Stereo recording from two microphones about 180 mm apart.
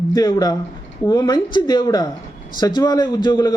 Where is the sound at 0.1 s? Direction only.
20° left (ahead or behind).